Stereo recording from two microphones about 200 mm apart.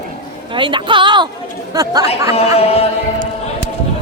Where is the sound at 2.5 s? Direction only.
30° left (ahead or behind).